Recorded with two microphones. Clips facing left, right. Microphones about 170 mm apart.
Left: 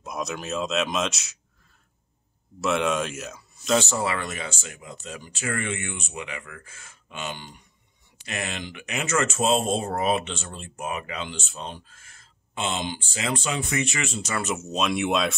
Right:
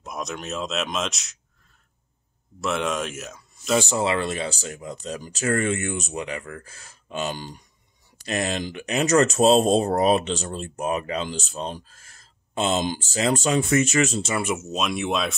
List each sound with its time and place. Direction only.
0.0 s speech: centre (ahead or behind)
2.6 s speech: centre (ahead or behind)
3.8 s speech: 20° right (ahead or behind); by 14.2 s 40° right (ahead or behind)
14.4 s speech: 5° right (ahead or behind)